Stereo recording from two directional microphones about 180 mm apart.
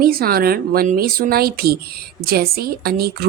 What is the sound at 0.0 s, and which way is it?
Speech, 55° right (ahead or behind).